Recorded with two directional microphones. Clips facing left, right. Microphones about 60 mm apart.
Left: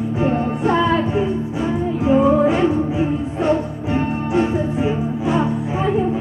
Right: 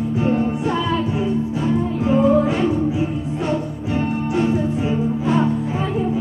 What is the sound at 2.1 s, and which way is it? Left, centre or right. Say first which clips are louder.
Music: left 3 dB; centre.